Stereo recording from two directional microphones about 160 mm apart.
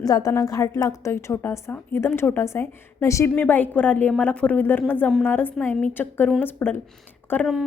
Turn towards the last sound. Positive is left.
turn(degrees=10)  # may be behind; listen again after turning